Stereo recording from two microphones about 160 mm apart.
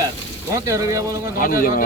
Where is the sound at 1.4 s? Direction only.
60° left (ahead or behind).